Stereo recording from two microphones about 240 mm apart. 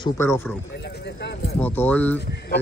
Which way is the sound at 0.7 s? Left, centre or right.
Left.